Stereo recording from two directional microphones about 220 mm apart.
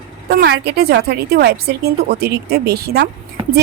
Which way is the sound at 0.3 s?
50° right (ahead or behind).